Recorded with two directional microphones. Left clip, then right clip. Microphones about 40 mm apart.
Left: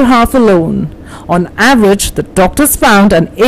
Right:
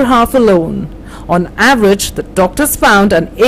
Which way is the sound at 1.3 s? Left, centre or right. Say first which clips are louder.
Left 1 dB; left.